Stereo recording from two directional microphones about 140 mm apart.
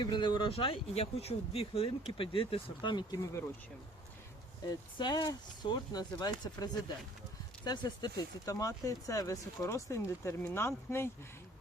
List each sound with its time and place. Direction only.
0.0 s speech: 35° left (ahead or behind)
4.7 s speech: 30° left (ahead or behind)